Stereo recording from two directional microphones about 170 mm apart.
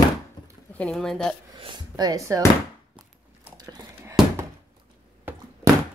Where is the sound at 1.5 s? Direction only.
30° right (ahead or behind).